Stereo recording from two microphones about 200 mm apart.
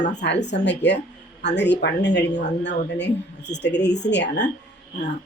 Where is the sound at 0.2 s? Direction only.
60° left (ahead or behind).